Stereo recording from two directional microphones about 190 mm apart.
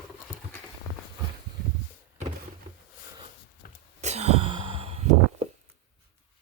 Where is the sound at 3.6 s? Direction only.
50° left (ahead or behind).